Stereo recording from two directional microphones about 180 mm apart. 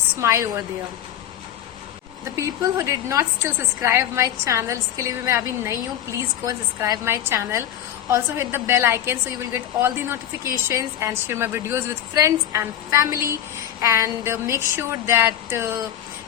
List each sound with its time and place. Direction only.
0.2 s a woman's voice: 15° right (ahead or behind)
2.3 s a woman's voice: 20° right (ahead or behind)